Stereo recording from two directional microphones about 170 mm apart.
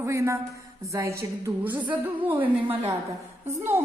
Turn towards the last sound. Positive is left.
turn(degrees=-15)  # may be behind; listen again after turning